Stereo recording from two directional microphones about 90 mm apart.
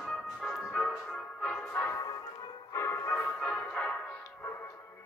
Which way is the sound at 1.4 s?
10° left (ahead or behind).